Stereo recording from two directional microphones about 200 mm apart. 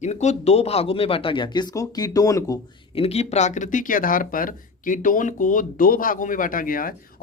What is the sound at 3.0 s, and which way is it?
Speech, 30° left (ahead or behind).